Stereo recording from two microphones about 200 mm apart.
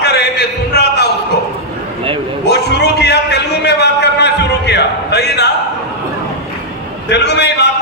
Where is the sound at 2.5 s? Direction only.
55° left (ahead or behind).